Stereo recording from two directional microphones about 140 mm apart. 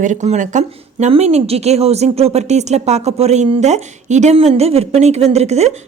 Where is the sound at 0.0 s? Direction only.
60° right (ahead or behind).